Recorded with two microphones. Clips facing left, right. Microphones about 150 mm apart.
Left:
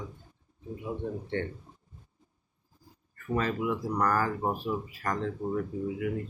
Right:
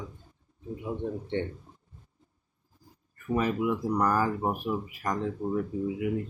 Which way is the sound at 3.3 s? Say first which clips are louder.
Right 2 dB; 15° right (ahead or behind).